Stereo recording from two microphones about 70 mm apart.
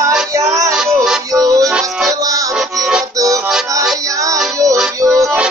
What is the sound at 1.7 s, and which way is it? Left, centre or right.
Music, centre.